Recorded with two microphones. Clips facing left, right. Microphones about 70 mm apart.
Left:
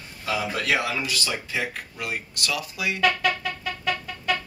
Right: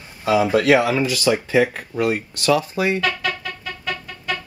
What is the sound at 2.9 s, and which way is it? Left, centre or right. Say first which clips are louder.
Music: even; centre.